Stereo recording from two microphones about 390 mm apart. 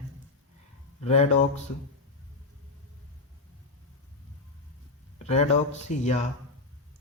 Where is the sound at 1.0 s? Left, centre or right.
Centre.